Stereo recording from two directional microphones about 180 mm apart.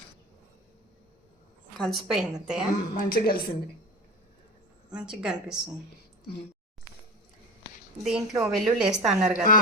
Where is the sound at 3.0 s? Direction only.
55° left (ahead or behind).